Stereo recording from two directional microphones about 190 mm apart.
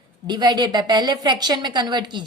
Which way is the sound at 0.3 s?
20° right (ahead or behind).